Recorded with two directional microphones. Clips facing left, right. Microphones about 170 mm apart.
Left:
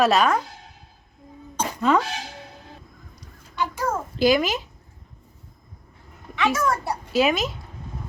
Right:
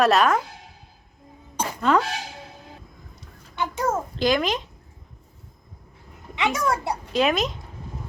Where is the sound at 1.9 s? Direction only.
Centre (ahead or behind).